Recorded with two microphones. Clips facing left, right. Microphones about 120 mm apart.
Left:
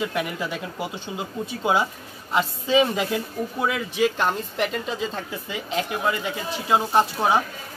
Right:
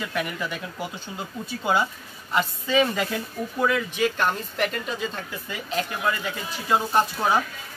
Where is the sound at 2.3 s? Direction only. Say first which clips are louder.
Left 2 dB; 15° left (ahead or behind).